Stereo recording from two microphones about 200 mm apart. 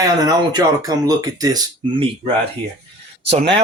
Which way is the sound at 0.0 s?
20° right (ahead or behind).